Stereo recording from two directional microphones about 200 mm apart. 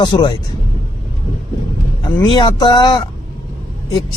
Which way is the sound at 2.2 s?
20° left (ahead or behind).